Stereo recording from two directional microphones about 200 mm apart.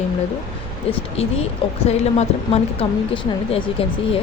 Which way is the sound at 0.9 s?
30° left (ahead or behind).